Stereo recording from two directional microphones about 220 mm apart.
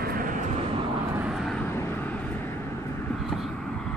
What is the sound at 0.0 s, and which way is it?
Vehicle, 40° right (ahead or behind).